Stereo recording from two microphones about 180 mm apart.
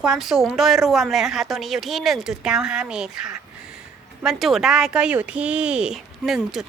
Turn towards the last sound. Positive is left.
turn(degrees=0)  # may be behind; listen again after turning